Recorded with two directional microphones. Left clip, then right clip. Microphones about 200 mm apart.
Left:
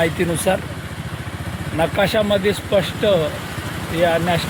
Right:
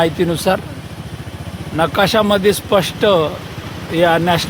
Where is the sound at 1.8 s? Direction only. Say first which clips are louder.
Right 4 dB; 35° right (ahead or behind).